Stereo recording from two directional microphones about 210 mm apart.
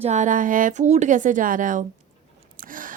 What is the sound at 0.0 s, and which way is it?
Speech, 35° right (ahead or behind).